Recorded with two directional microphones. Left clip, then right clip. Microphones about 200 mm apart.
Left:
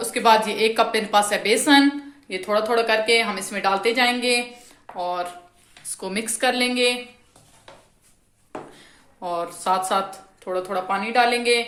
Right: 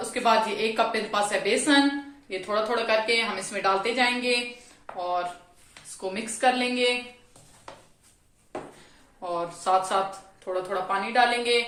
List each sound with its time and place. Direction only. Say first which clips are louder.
0.1 s a woman's voice: left 5 dB; 50° left (ahead or behind)
9.2 s a woman's voice: left 3 dB; 50° left (ahead or behind)